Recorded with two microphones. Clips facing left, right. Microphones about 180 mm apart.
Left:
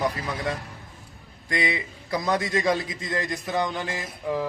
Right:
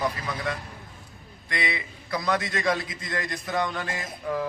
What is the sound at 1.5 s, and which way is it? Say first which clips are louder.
Speech: left 4 dB; 40° left (ahead or behind).